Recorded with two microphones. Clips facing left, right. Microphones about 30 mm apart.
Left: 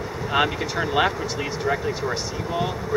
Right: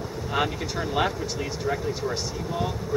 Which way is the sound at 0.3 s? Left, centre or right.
Left.